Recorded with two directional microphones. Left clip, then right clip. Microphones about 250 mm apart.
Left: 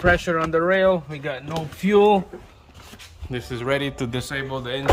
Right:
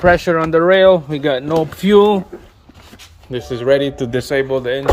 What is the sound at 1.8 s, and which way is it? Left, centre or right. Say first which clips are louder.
Speech: right 4 dB; centre.